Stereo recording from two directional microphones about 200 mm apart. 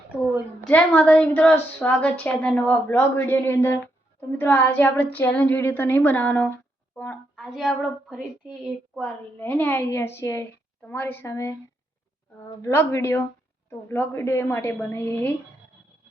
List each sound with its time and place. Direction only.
0.7 s a woman's voice: 5° left (ahead or behind)